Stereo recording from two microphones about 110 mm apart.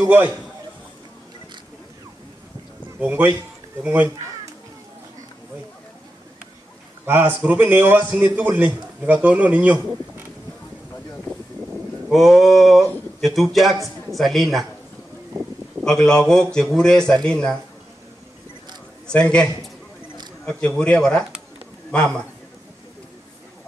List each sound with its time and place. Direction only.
0.0 s a man's voice: 20° right (ahead or behind)
3.0 s a man's voice: 15° right (ahead or behind)
7.1 s a man's voice: 20° right (ahead or behind)
12.1 s speech: centre (ahead or behind)
15.8 s speech: 5° left (ahead or behind)
19.0 s speech: 10° left (ahead or behind)